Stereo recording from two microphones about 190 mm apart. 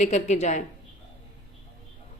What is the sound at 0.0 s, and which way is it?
Speech, 35° left (ahead or behind).